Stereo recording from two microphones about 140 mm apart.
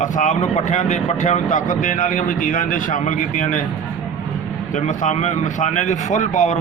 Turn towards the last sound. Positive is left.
turn(degrees=55)  # may be behind; listen again after turning